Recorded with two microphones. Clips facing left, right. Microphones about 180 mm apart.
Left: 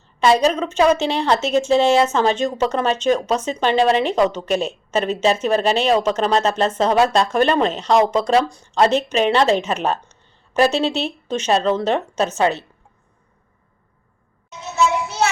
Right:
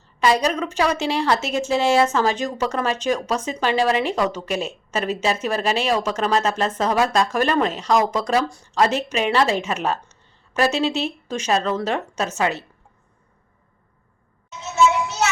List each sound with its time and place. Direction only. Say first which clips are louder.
0.4 s a woman's voice: left 5 dB; 25° left (ahead or behind)